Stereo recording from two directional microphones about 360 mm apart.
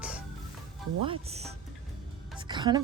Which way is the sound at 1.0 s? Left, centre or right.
Centre.